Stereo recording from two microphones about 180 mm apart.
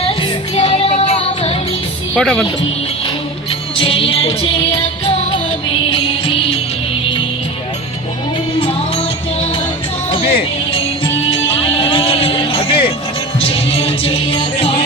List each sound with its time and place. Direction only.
0.0 s music: 30° left (ahead or behind)
2.1 s speech: 5° left (ahead or behind)
3.8 s music: 30° left (ahead or behind)
10.1 s music: 30° left (ahead or behind)